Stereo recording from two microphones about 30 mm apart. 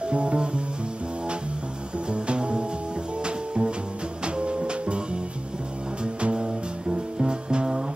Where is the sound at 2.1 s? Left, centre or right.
Right.